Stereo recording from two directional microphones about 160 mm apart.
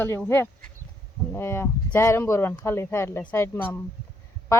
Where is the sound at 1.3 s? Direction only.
15° left (ahead or behind).